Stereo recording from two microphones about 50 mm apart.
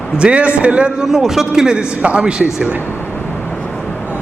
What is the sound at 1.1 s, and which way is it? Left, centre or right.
A man's voice, centre.